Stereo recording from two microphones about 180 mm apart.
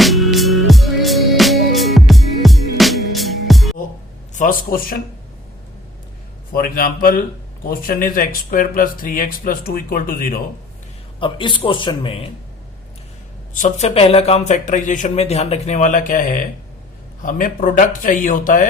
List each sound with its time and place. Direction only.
0.0 s music: centre (ahead or behind)
4.4 s speech: 50° left (ahead or behind)
6.5 s speech: 50° left (ahead or behind)
11.2 s a man's voice: 25° left (ahead or behind)
13.5 s speech: 40° left (ahead or behind)